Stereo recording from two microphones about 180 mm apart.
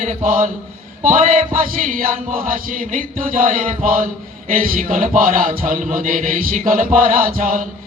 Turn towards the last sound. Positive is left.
turn(degrees=-50)  # may be behind; listen again after turning